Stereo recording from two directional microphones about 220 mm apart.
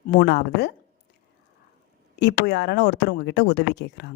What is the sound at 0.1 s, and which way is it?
Speech, 50° left (ahead or behind).